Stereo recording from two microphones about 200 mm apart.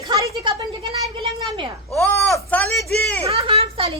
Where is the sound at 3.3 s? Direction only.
30° right (ahead or behind).